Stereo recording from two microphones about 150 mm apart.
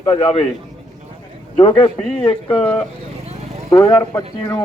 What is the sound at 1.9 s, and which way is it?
Speech, 10° left (ahead or behind).